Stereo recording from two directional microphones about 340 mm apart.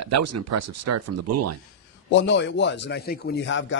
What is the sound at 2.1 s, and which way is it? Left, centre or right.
A man's voice, left.